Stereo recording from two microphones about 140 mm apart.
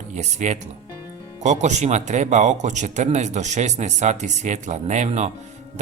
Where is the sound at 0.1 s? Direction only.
60° right (ahead or behind).